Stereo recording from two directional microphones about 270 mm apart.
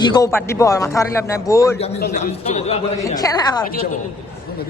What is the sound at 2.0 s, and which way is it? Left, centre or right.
Speech, left.